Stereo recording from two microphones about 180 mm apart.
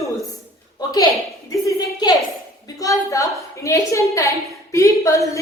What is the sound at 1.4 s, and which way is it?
A woman's voice, 20° left (ahead or behind).